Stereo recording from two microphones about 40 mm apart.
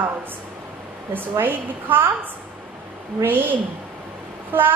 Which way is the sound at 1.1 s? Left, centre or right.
Right.